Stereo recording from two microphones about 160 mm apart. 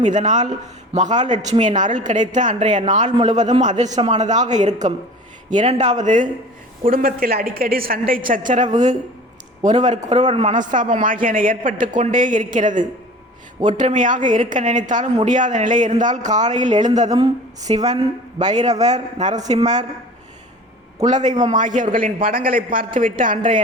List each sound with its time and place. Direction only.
0.0 s a woman's voice: 50° right (ahead or behind)
6.8 s a man's voice: 60° right (ahead or behind)
8.4 s a woman's voice: 50° right (ahead or behind)
17.1 s speech: 25° right (ahead or behind)
18.3 s a woman's voice: 45° right (ahead or behind)
19.3 s speech: 25° right (ahead or behind)
19.5 s a woman's voice: 45° right (ahead or behind)
21.0 s a woman's voice: 50° right (ahead or behind)